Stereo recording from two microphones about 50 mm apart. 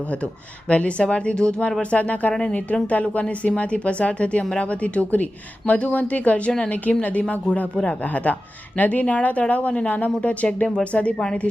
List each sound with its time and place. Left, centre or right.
0.7 s a woman's voice: left